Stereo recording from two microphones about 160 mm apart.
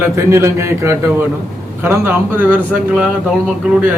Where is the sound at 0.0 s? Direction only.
15° right (ahead or behind).